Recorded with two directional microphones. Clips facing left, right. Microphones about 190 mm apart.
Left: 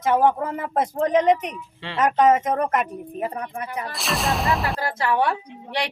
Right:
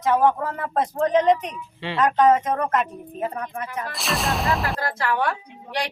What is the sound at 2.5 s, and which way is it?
A woman's voice, 10° left (ahead or behind).